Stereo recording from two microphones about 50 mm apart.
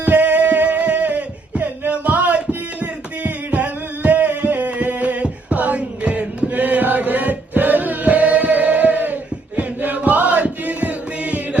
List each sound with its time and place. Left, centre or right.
0.0 s a sound: right
2.8 s music: right
9.6 s chant: right